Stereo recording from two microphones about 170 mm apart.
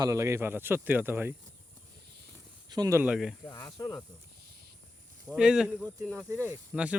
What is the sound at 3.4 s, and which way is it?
Speech, 25° left (ahead or behind).